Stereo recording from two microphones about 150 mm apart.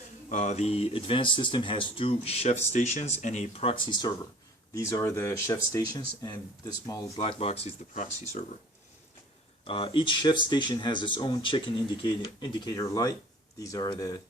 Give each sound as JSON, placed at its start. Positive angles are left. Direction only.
{"t": 0.3, "sound": "speech", "side_deg": 50}
{"t": 7.2, "sound": "speech", "side_deg": 40}
{"t": 9.6, "sound": "speech", "side_deg": 35}